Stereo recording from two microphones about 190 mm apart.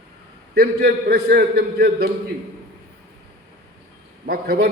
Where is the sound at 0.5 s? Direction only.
55° right (ahead or behind).